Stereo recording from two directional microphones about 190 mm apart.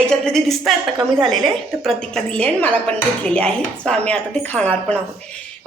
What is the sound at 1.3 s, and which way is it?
A woman's voice, centre (ahead or behind).